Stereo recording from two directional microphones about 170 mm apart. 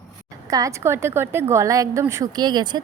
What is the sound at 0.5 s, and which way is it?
A woman's voice, 20° right (ahead or behind).